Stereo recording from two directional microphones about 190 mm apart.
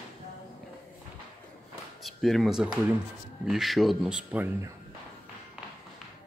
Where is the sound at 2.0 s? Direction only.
Centre (ahead or behind).